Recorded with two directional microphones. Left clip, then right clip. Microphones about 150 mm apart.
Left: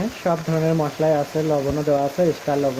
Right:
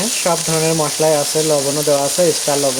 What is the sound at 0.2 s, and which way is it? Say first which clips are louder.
Speech: right 4 dB; 35° right (ahead or behind).